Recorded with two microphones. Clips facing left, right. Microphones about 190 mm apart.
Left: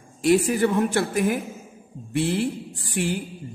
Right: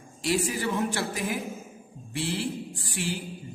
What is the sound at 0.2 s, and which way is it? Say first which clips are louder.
A woman's voice: left 9 dB; 55° left (ahead or behind).